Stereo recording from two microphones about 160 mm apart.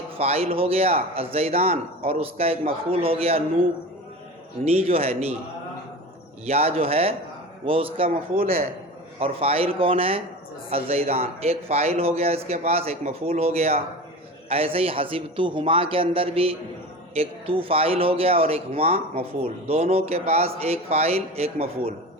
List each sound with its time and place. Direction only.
0.2 s speech: 40° right (ahead or behind)
4.6 s speech: 40° right (ahead or behind)
6.4 s speech: 40° right (ahead or behind)
9.2 s speech: 40° right (ahead or behind)